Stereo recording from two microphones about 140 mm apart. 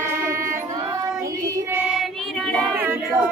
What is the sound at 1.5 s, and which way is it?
Child singing, 15° right (ahead or behind).